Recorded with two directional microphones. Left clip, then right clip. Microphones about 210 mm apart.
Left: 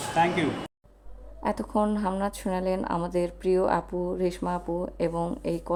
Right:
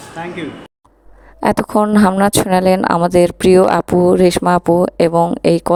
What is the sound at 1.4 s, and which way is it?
Speech, 50° right (ahead or behind).